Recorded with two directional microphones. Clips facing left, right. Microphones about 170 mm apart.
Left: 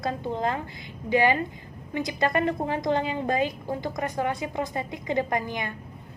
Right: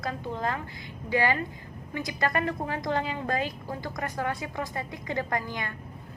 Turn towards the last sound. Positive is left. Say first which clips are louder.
# left 4 dB
turn(degrees=20)  # may be behind; listen again after turning